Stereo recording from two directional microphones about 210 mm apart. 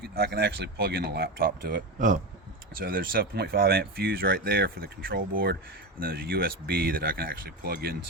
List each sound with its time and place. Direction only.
0.0 s speech: 50° right (ahead or behind)